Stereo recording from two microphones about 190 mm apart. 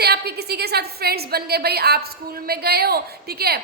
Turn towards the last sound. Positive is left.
turn(degrees=-55)  # may be behind; listen again after turning